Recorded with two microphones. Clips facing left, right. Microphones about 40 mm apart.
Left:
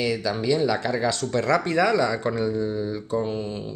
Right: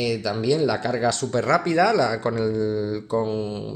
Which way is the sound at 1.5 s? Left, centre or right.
Centre.